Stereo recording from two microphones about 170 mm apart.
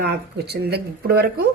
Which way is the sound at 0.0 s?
75° right (ahead or behind).